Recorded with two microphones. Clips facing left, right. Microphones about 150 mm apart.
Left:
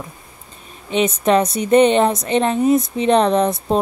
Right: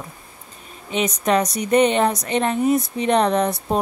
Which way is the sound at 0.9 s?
25° left (ahead or behind).